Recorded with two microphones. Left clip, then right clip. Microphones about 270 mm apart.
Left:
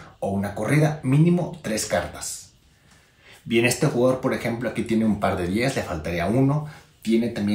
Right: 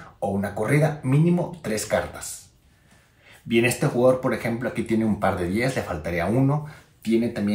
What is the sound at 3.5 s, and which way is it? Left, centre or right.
Speech, centre.